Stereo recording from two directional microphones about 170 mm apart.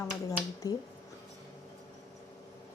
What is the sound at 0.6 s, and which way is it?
Speech, 20° left (ahead or behind).